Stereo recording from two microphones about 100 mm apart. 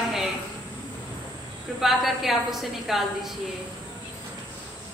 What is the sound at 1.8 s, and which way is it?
A woman's voice, centre (ahead or behind).